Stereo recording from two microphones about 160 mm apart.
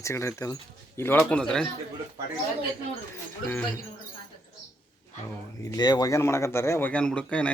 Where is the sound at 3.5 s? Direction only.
15° left (ahead or behind).